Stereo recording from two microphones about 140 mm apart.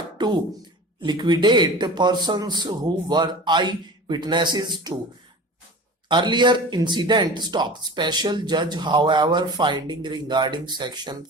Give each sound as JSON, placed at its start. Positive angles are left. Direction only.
{"t": 0.2, "sound": "a sound", "side_deg": -30}
{"t": 1.0, "sound": "speech", "side_deg": -30}
{"t": 6.1, "sound": "speech", "side_deg": -35}